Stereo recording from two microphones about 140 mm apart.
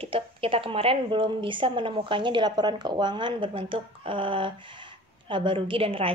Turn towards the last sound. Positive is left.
turn(degrees=-40)  # may be behind; listen again after turning